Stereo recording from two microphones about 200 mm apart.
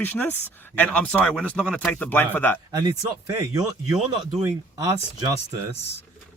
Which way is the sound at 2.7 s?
15° right (ahead or behind).